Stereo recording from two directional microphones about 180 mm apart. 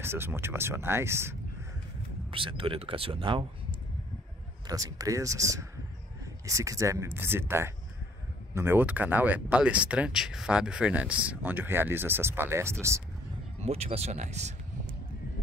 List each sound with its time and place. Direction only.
0.0 s speech: 10° right (ahead or behind)
2.3 s speech: 30° right (ahead or behind)
4.6 s speech: 20° right (ahead or behind)
13.6 s speech: 35° right (ahead or behind)